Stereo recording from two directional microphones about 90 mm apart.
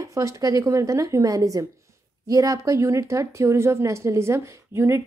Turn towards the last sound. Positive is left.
turn(degrees=-30)  # may be behind; listen again after turning